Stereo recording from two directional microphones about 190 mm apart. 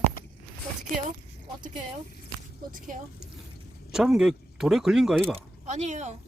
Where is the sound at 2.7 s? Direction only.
45° right (ahead or behind).